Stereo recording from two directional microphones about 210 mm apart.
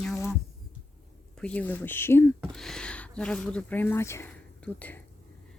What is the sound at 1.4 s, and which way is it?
Speech, 5° left (ahead or behind).